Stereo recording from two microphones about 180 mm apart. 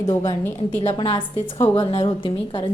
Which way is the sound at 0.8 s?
30° left (ahead or behind).